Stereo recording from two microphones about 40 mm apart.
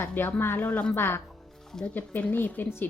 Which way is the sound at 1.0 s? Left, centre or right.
Left.